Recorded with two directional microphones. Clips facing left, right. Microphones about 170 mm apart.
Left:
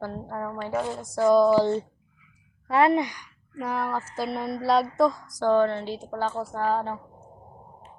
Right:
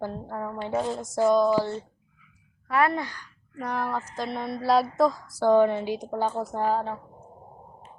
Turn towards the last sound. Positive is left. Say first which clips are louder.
# even
turn(degrees=-10)  # may be behind; listen again after turning